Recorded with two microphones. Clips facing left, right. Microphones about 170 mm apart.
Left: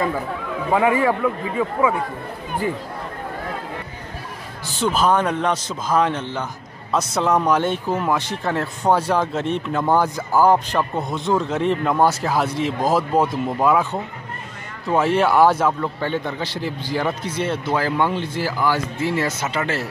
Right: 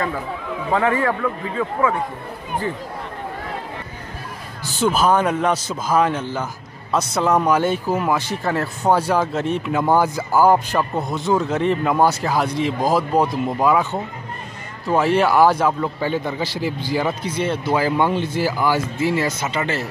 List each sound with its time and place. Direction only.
0.7 s a man's voice: 10° left (ahead or behind)
4.7 s speech: 5° right (ahead or behind)